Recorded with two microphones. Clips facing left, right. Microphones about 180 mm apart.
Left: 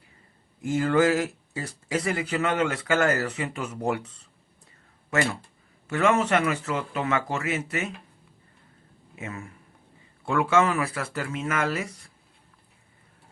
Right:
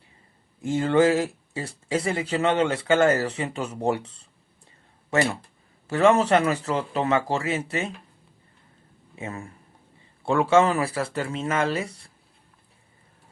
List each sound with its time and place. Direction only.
0.6 s speech: 30° right (ahead or behind)
5.9 s speech: 35° right (ahead or behind)
9.1 s speech: 30° right (ahead or behind)